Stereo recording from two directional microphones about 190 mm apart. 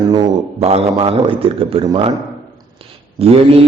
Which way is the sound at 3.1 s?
30° right (ahead or behind).